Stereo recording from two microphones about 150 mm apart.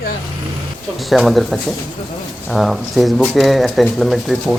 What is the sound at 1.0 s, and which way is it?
Speech, centre (ahead or behind).